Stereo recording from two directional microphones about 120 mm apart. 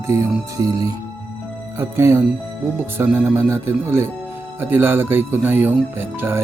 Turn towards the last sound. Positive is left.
turn(degrees=-20)  # may be behind; listen again after turning